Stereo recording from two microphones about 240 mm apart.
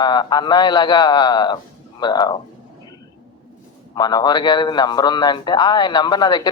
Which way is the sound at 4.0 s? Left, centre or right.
Centre.